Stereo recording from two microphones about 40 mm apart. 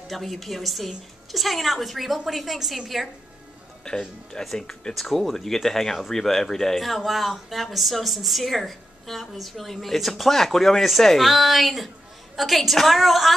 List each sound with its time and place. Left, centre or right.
0.1 s a woman's voice: centre
3.9 s speech: centre
4.9 s a woman's voice: centre